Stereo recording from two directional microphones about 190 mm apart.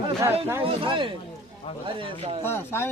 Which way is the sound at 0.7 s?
25° right (ahead or behind).